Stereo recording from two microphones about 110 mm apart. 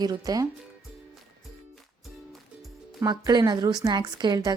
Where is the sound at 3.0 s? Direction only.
35° right (ahead or behind).